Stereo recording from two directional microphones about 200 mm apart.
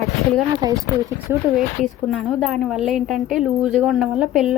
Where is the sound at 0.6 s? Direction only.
20° right (ahead or behind).